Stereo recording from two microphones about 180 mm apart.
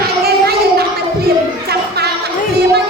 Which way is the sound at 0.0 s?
60° right (ahead or behind).